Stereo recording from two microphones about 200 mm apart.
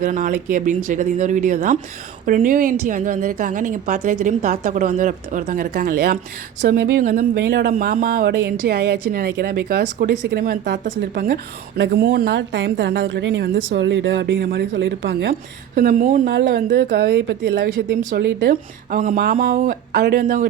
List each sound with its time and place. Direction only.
0.0 s a woman's voice: 40° right (ahead or behind); by 15.3 s 65° right (ahead or behind)
15.3 s a woman's voice: 50° right (ahead or behind)
18.9 s speech: 45° right (ahead or behind)